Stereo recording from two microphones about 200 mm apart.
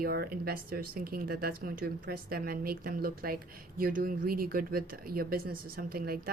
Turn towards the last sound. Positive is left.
turn(degrees=-50)  # may be behind; listen again after turning